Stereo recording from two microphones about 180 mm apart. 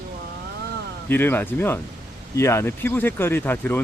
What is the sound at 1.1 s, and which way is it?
Speech, 10° left (ahead or behind).